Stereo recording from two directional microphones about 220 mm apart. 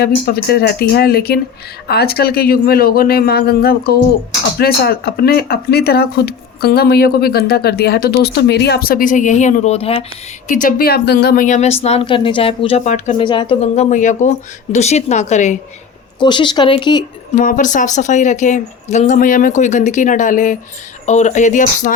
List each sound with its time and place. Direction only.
0.0 s speech: 45° left (ahead or behind); by 10.0 s 25° left (ahead or behind)
10.5 s a woman's voice: 40° left (ahead or behind)
13.2 s a woman's voice: 20° left (ahead or behind)
16.2 s speech: 20° left (ahead or behind)
17.3 s a woman's voice: 35° left (ahead or behind)